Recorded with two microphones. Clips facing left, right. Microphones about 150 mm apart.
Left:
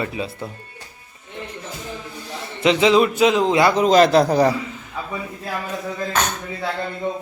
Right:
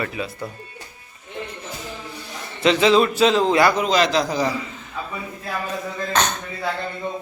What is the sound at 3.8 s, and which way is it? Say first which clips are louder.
Speech: left 6 dB; 45° left (ahead or behind).